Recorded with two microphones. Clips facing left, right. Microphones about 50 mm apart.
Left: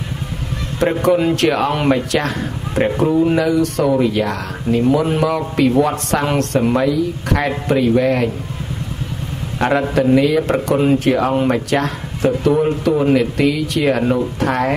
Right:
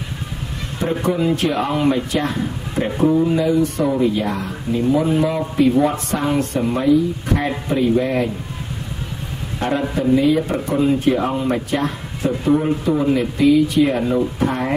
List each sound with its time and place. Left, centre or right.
0.7 s speech: left
9.6 s a man's voice: left